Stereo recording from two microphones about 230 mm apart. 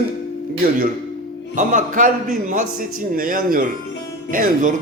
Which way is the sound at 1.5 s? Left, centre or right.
Right.